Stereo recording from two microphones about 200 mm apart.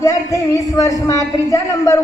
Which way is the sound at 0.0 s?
15° left (ahead or behind).